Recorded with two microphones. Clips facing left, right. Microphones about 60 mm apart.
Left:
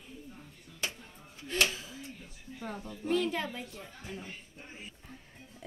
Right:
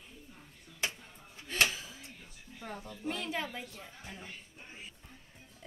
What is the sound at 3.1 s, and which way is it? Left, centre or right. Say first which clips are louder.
Speech: left 6 dB; centre.